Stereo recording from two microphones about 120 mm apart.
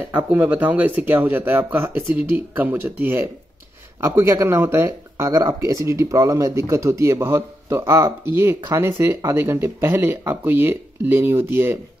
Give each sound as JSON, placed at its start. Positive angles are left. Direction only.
{"t": 0.1, "sound": "speech", "side_deg": -15}